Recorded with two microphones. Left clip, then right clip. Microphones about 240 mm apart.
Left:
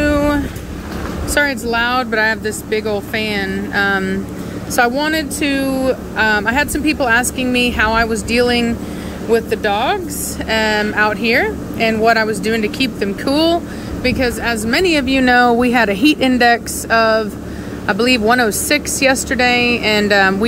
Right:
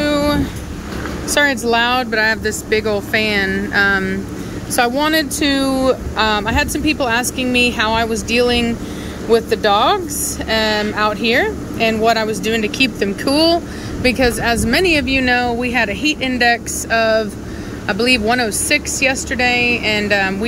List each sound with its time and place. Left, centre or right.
0.0 s vehicle: centre
1.3 s speech: centre